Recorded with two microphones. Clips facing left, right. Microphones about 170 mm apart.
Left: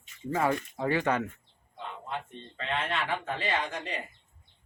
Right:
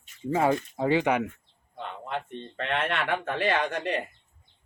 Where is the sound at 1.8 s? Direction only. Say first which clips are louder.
Right 4 dB; 65° right (ahead or behind).